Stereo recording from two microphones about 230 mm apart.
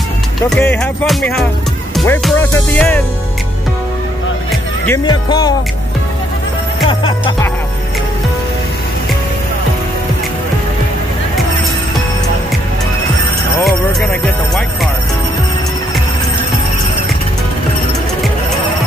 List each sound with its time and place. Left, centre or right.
0.5 s music: centre
4.8 s music: centre
6.9 s music: left
13.7 s music: centre